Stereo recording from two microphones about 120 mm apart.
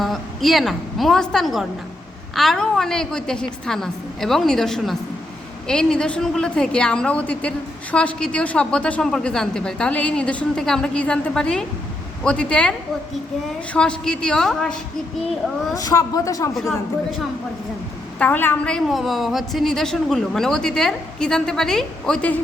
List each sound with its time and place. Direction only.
0.0 s a woman's voice: centre (ahead or behind)
13.7 s a woman's voice: 5° left (ahead or behind)
15.7 s speech: 30° left (ahead or behind)
16.6 s a woman's voice: centre (ahead or behind)
18.2 s a woman's voice: 15° left (ahead or behind)